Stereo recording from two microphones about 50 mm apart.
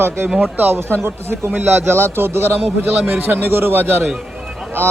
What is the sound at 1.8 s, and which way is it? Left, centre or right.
A man's voice, right.